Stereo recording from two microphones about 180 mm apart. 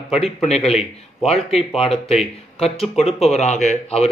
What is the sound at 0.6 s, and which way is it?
A man's voice, 35° left (ahead or behind).